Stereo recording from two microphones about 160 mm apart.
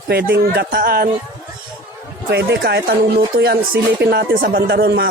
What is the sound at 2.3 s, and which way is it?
A man's voice, 85° right.